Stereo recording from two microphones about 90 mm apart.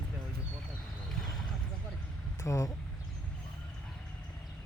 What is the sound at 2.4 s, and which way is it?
Speech, 35° left (ahead or behind).